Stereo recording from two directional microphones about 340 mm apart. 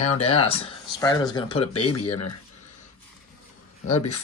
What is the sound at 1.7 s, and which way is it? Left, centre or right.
Speech, left.